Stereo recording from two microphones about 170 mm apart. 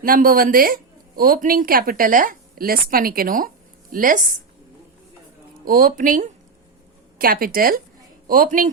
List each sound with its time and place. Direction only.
0.0 s speech: 60° right (ahead or behind)
5.6 s speech: 60° right (ahead or behind)